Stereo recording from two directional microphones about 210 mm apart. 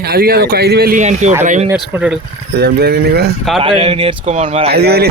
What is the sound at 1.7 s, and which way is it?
Speech, 5° right (ahead or behind).